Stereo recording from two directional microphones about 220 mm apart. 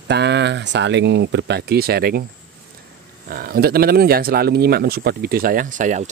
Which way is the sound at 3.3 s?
45° right (ahead or behind).